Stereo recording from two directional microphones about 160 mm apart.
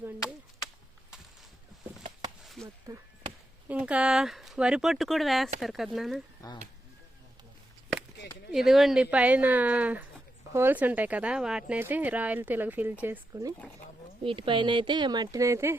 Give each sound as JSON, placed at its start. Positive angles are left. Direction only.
{"t": 2.4, "sound": "chop", "side_deg": 0}
{"t": 2.9, "sound": "speech", "side_deg": -20}
{"t": 3.7, "sound": "speech", "side_deg": -10}
{"t": 8.5, "sound": "a woman's voice", "side_deg": 0}
{"t": 14.3, "sound": "speech", "side_deg": -35}